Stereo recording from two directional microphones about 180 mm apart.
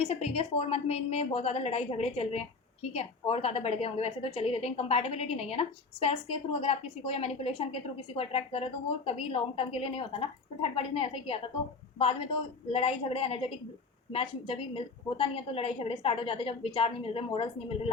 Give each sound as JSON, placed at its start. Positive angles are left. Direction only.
{"t": 0.0, "sound": "a woman's voice", "side_deg": 35}